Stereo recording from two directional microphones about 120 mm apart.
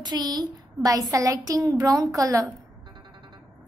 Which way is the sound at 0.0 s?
35° right (ahead or behind).